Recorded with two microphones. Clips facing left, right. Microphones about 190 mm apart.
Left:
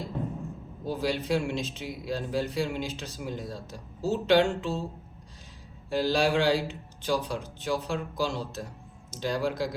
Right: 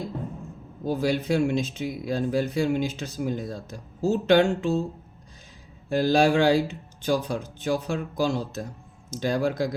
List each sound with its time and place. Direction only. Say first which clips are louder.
0.9 s speech: right 4 dB; 50° right (ahead or behind)
5.9 s speech: right 5 dB; 45° right (ahead or behind)